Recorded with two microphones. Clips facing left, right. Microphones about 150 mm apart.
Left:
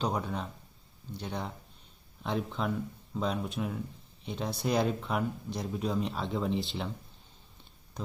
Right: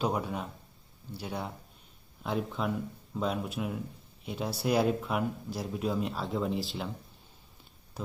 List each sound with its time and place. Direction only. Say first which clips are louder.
0.0 s speech: right 1 dB; 10° right (ahead or behind)
8.0 s speech: even; 5° right (ahead or behind)